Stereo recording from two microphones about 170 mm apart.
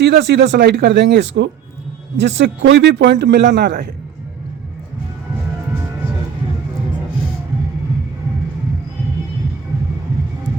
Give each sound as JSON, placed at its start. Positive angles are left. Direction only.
{"t": 0.0, "sound": "a man's voice", "side_deg": -90}